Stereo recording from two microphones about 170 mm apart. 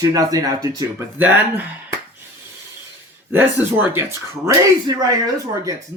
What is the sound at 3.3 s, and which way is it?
Speech, 15° right (ahead or behind).